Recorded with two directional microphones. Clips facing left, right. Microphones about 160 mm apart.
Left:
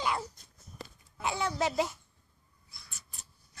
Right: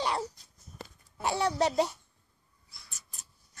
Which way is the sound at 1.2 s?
35° right (ahead or behind).